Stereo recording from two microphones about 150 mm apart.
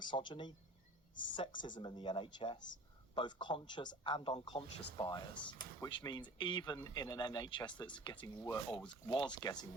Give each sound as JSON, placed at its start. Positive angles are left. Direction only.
{"t": 0.0, "sound": "speech", "side_deg": 30}